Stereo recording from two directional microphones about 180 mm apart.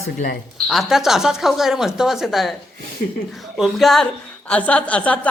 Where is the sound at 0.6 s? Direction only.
Centre (ahead or behind).